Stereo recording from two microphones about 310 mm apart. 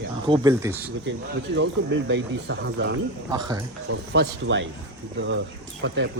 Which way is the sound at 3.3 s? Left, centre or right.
Centre.